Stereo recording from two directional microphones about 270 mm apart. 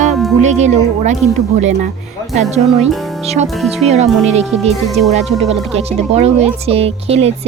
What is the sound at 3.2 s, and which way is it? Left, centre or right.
Music, right.